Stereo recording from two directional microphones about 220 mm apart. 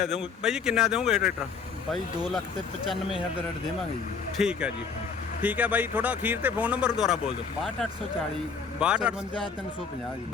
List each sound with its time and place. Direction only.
0.0 s speech: centre (ahead or behind)
4.4 s speech: 5° right (ahead or behind)
8.8 s speech: 5° right (ahead or behind)